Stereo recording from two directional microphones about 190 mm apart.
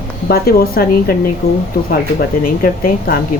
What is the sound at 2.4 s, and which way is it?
Speech, 50° left (ahead or behind).